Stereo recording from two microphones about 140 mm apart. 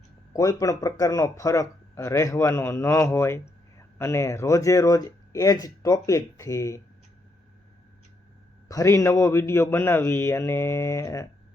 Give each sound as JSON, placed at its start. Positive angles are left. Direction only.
{"t": 0.3, "sound": "speech", "side_deg": 25}
{"t": 8.6, "sound": "speech", "side_deg": 25}